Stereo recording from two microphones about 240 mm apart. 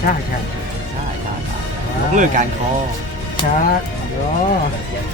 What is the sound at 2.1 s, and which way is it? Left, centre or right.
Speech, right.